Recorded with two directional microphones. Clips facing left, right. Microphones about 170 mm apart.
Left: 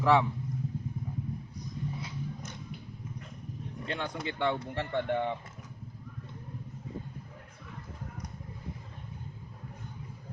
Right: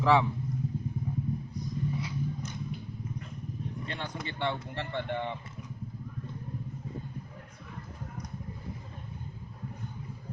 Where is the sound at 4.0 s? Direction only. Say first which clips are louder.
Left 4 dB; 50° left (ahead or behind).